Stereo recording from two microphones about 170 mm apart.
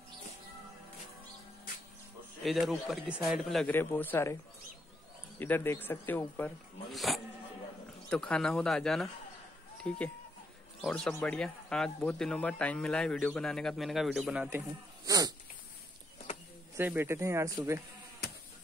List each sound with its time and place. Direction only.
2.4 s speech: centre (ahead or behind)
3.7 s speech: 10° left (ahead or behind)
5.4 s speech: 15° left (ahead or behind)
6.9 s speech: centre (ahead or behind)
15.0 s dog: 20° right (ahead or behind)
16.7 s speech: 10° right (ahead or behind)